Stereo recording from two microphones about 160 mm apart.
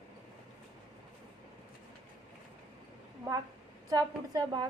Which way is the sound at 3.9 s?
20° right (ahead or behind).